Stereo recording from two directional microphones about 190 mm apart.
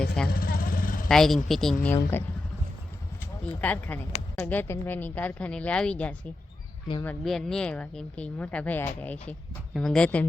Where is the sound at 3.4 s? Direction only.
5° left (ahead or behind).